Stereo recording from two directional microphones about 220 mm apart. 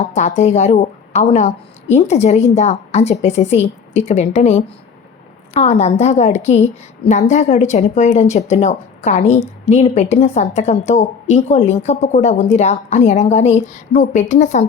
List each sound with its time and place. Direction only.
0.0 s a woman's voice: 30° left (ahead or behind)